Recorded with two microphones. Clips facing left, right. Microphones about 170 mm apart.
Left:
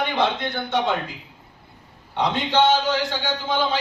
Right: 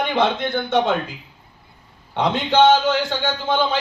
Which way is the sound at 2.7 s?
50° right (ahead or behind).